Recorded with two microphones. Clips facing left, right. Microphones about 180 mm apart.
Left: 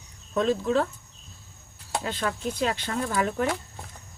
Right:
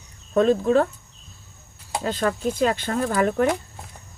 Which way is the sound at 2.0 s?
45° right (ahead or behind).